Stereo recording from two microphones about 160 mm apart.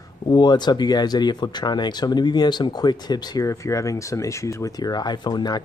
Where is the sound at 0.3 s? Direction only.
25° left (ahead or behind).